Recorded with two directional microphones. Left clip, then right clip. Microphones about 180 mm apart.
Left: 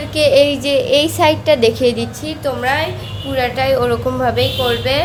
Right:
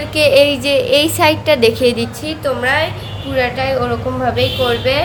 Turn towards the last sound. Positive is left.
turn(degrees=20)  # may be behind; listen again after turning